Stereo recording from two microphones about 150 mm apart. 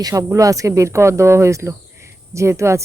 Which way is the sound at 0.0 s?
20° right (ahead or behind).